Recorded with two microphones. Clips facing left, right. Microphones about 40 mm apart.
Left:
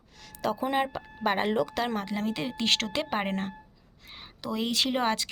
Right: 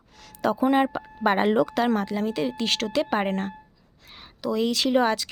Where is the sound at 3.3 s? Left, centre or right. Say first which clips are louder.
Right 4 dB; left.